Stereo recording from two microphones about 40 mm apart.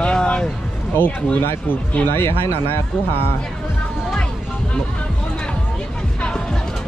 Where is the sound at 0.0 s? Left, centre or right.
Left.